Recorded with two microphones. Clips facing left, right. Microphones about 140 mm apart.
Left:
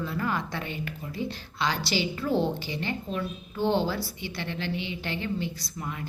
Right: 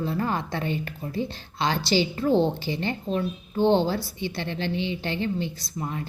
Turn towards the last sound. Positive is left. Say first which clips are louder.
# right 4 dB
turn(degrees=-30)  # may be behind; listen again after turning